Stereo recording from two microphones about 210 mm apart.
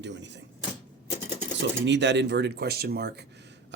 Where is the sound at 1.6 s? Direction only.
55° right (ahead or behind).